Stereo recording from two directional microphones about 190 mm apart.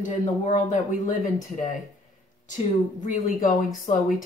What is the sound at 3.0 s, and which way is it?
Speech, 40° left (ahead or behind).